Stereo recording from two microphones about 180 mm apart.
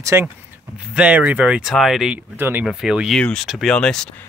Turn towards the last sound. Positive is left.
turn(degrees=5)  # may be behind; listen again after turning